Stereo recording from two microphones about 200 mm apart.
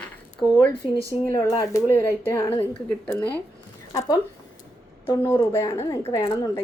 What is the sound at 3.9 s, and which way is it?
Speech, 20° left (ahead or behind).